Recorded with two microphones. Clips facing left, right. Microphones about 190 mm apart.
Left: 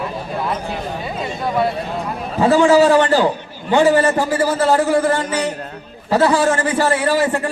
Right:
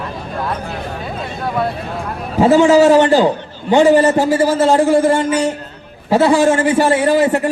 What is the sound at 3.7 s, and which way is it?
A man's voice, 25° right (ahead or behind).